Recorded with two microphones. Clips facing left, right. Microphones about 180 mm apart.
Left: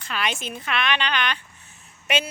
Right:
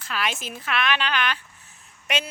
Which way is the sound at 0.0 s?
Centre (ahead or behind).